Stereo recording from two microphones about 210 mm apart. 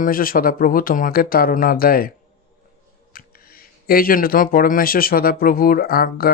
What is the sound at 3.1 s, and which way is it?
Speech, 45° left (ahead or behind).